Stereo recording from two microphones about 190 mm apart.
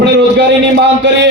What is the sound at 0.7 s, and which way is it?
Speech, 65° right (ahead or behind).